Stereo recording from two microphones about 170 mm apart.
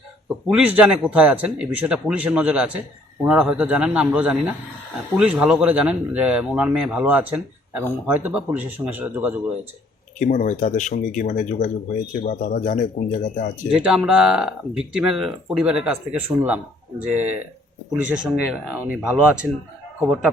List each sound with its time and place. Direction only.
0.4 s speech: 5° right (ahead or behind)
10.2 s speech: 50° left (ahead or behind)
13.7 s speech: 5° right (ahead or behind)